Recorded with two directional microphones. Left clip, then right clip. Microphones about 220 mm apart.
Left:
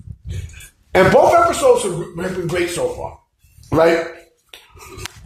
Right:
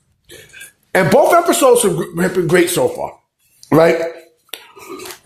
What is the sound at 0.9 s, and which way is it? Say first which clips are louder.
A man's voice: even; 55° right (ahead or behind).